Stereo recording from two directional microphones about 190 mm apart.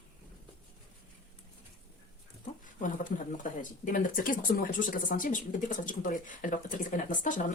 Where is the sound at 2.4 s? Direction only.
45° left (ahead or behind).